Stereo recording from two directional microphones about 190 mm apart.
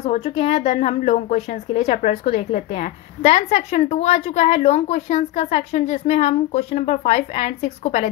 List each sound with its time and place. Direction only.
0.0 s a woman's voice: 35° left (ahead or behind)